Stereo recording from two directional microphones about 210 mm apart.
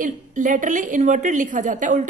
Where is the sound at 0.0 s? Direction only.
40° right (ahead or behind).